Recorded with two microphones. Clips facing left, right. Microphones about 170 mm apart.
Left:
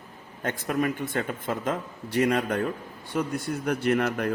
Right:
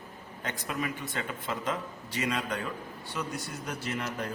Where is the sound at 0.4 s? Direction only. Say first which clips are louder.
Left 8 dB; 50° left (ahead or behind).